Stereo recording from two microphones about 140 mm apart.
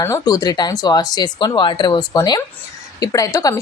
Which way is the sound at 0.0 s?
25° left (ahead or behind).